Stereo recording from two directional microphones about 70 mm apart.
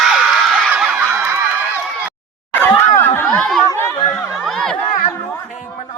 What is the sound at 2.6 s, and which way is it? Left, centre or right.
Snicker, left.